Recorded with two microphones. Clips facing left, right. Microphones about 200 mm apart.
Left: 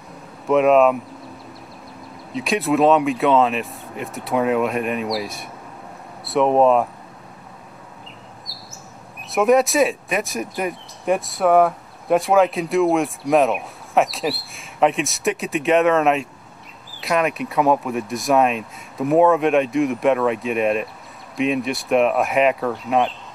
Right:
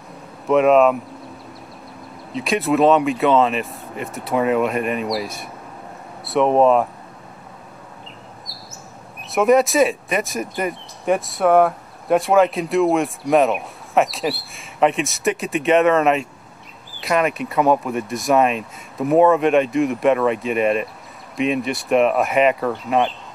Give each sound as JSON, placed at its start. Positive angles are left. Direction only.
{"t": 0.5, "sound": "speech", "side_deg": 0}
{"t": 2.3, "sound": "speech", "side_deg": 0}
{"t": 9.3, "sound": "speech", "side_deg": 0}